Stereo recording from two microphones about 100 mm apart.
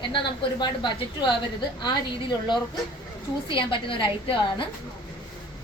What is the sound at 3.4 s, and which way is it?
Speech, 60° left (ahead or behind).